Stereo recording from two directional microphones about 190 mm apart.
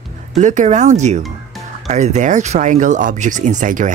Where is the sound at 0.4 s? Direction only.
40° right (ahead or behind).